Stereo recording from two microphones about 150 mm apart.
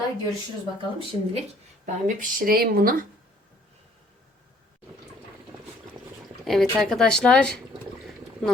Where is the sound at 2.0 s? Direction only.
70° right (ahead or behind).